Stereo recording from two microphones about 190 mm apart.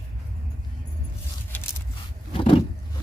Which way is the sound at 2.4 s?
30° left (ahead or behind).